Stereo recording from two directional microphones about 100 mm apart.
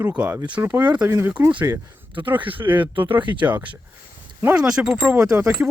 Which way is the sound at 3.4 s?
15° right (ahead or behind).